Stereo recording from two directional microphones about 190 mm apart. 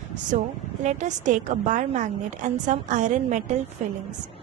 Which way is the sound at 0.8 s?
40° right (ahead or behind).